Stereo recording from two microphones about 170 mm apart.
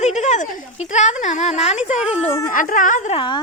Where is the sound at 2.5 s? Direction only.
50° left (ahead or behind).